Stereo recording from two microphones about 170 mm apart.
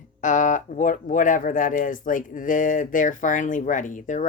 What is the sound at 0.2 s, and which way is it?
Speech, 45° left (ahead or behind).